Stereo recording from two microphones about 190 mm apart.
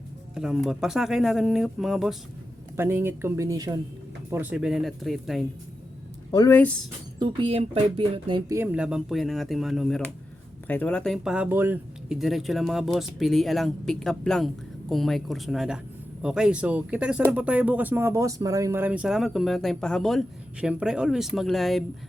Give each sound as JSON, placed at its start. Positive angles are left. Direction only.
{"t": 0.3, "sound": "speech", "side_deg": 0}
{"t": 2.7, "sound": "speech", "side_deg": -10}
{"t": 6.3, "sound": "speech", "side_deg": 20}
{"t": 7.2, "sound": "speech", "side_deg": -25}
{"t": 8.4, "sound": "speech", "side_deg": -10}